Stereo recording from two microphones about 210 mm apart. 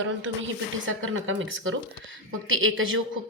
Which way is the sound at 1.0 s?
65° right (ahead or behind).